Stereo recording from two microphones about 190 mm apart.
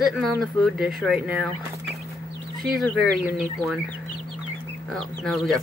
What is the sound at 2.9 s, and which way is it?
Speech, centre (ahead or behind).